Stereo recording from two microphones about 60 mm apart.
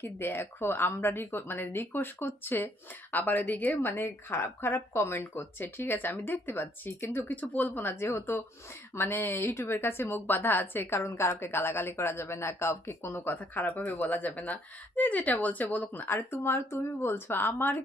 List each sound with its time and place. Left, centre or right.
0.0 s a woman's voice: left
13.3 s speech: left
16.1 s speech: left